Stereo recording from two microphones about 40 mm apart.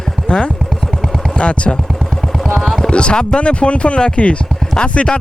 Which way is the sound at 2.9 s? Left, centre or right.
Left.